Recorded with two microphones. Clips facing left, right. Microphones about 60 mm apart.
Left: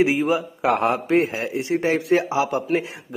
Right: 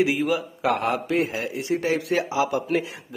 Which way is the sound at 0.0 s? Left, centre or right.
Left.